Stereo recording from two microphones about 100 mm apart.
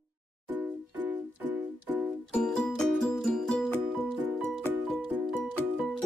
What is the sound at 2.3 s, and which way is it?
Music, 10° left (ahead or behind).